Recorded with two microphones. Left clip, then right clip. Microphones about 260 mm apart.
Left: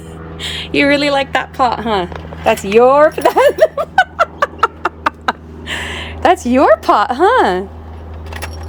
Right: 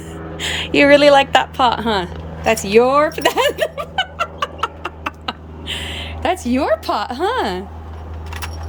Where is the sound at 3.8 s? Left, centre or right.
Centre.